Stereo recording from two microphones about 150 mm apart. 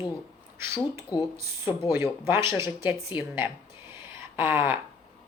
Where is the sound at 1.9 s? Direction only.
15° right (ahead or behind).